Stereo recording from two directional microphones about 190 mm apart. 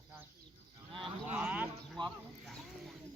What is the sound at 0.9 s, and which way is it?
Livestock, 25° right (ahead or behind).